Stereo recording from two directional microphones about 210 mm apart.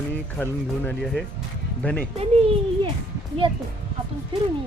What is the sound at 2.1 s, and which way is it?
Speech, 25° right (ahead or behind).